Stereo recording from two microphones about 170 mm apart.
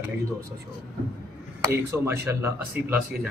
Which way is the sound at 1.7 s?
15° right (ahead or behind).